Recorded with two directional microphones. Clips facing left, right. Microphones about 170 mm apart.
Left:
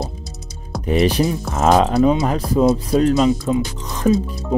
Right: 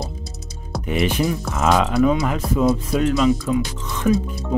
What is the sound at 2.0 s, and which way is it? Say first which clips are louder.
Speech: left 2 dB; 25° left (ahead or behind).